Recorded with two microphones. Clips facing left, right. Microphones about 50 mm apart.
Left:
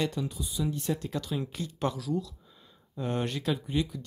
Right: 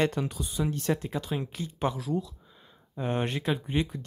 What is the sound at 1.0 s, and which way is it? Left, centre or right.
Speech, right.